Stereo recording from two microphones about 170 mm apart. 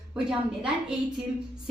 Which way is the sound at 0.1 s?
5° right (ahead or behind).